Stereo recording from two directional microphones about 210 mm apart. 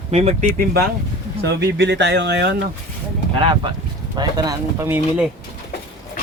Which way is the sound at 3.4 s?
25° right (ahead or behind).